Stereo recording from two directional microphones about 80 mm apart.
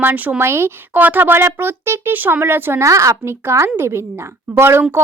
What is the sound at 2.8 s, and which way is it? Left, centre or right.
Speech, right.